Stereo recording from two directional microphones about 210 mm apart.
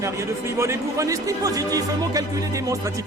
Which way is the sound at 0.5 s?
15° right (ahead or behind).